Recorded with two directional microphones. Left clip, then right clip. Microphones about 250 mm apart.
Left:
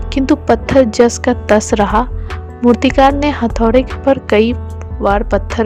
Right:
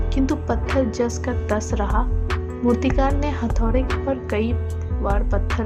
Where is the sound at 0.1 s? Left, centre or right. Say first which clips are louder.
Left 11 dB; left.